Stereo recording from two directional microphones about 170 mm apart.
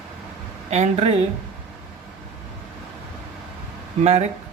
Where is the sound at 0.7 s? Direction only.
40° right (ahead or behind).